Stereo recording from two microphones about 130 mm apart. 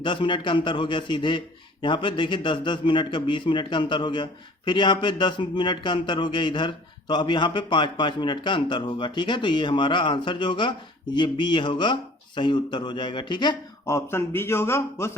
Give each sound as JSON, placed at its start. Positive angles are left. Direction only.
{"t": 0.0, "sound": "a man's voice", "side_deg": 40}
{"t": 13.8, "sound": "a man's voice", "side_deg": 20}